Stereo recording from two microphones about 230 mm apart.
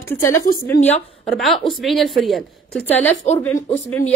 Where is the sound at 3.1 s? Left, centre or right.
Left.